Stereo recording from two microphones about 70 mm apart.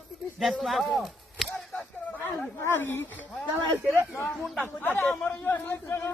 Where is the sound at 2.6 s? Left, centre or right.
Left.